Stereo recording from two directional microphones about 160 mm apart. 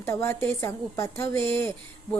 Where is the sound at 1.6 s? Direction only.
15° left (ahead or behind).